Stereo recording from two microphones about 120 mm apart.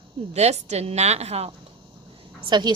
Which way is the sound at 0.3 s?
65° right (ahead or behind).